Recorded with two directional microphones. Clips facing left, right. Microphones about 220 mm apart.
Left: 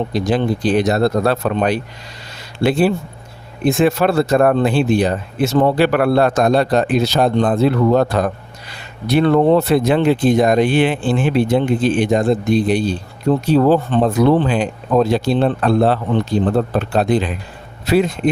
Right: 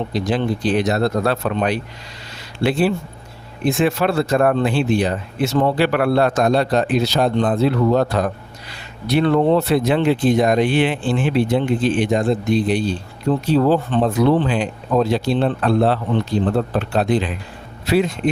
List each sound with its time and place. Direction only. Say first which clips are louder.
0.1 s speech: left 3 dB; 45° left (ahead or behind)